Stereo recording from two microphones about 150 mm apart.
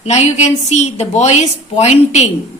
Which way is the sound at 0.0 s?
50° left (ahead or behind).